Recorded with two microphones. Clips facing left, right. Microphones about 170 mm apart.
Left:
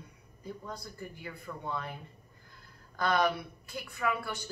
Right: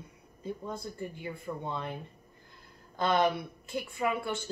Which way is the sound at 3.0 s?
20° right (ahead or behind).